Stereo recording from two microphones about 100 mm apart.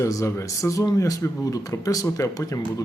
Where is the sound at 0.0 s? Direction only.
30° left (ahead or behind).